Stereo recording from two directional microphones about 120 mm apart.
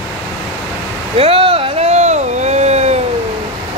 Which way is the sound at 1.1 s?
50° right (ahead or behind).